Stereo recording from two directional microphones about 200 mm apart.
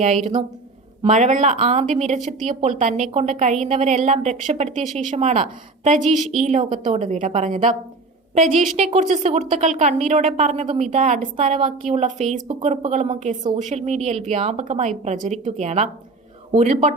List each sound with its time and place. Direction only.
0.0 s a woman's voice: 35° right (ahead or behind)